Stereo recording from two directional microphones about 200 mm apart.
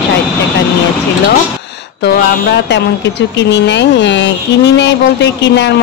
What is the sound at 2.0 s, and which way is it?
Speech, 60° left (ahead or behind).